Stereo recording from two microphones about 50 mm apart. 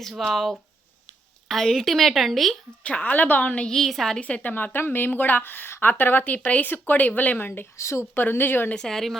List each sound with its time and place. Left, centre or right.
0.0 s a woman's voice: centre
3.0 s speech: left
3.7 s a woman's voice: centre
4.2 s speech: left
4.5 s speech: left
7.4 s speech: left
7.8 s speech: left
8.1 s speech: left
8.7 s a woman's voice: centre